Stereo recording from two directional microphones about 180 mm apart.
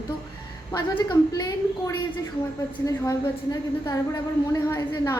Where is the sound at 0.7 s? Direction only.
20° left (ahead or behind).